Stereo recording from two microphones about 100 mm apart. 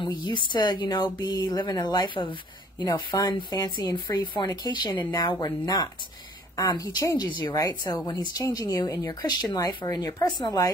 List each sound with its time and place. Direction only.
0.0 s speech: 50° left (ahead or behind)